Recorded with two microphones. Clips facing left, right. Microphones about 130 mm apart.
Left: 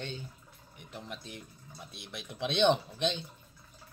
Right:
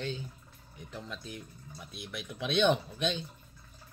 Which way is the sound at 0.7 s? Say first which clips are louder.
Right 1 dB; 20° left (ahead or behind).